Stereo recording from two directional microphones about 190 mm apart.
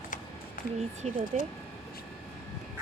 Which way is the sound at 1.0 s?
35° right (ahead or behind).